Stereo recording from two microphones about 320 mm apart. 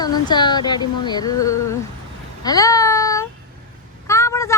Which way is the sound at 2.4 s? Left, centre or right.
Centre.